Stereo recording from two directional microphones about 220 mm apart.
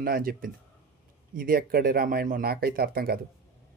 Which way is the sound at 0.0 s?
40° right (ahead or behind).